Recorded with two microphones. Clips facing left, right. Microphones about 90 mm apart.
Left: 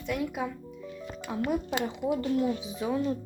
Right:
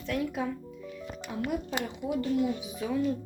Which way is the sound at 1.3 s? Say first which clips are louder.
Left 3 dB; 25° left (ahead or behind).